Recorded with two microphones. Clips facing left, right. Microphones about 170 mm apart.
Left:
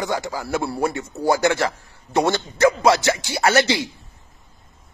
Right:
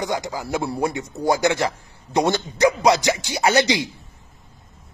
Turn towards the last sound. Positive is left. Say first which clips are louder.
# even
turn(degrees=-15)  # may be behind; listen again after turning